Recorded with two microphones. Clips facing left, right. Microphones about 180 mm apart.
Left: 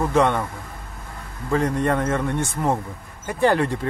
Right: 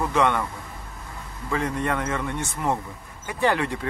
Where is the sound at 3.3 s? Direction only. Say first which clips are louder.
Left 4 dB; 40° left (ahead or behind).